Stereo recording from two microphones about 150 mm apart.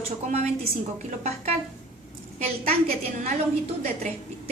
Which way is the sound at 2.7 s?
75° right (ahead or behind).